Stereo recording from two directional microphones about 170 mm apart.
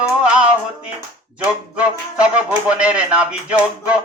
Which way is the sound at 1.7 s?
5° right (ahead or behind).